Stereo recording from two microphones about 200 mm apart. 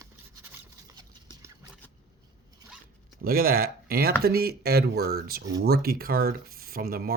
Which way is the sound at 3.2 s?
50° right (ahead or behind).